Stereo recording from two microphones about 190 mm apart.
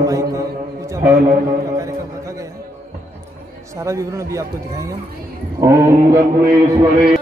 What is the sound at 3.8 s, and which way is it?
A man's voice, 15° right (ahead or behind).